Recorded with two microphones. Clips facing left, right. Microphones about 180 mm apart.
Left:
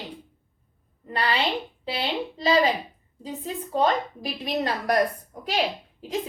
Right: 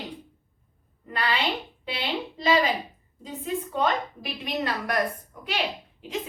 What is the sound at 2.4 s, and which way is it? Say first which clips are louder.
A woman's voice: left 2 dB; 35° left (ahead or behind).